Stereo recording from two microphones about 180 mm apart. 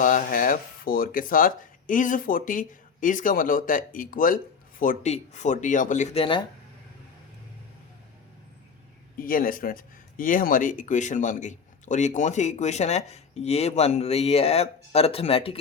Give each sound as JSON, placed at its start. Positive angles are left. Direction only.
{"t": 0.0, "sound": "speech", "side_deg": 50}
{"t": 9.1, "sound": "speech", "side_deg": 50}